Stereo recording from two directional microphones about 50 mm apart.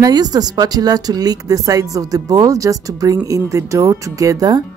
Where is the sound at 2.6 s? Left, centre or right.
Right.